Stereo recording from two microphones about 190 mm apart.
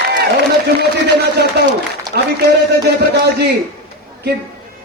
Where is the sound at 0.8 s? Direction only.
60° right (ahead or behind).